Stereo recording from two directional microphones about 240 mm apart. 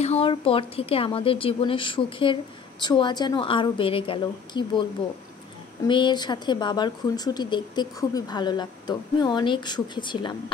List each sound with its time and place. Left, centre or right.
0.0 s speech: left
5.9 s speech: centre